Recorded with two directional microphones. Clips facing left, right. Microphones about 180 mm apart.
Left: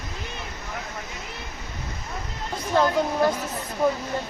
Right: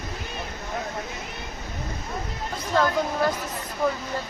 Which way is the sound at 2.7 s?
20° left (ahead or behind).